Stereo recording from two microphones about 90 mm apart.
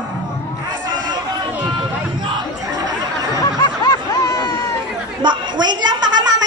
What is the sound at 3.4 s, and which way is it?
Snicker, 45° left (ahead or behind).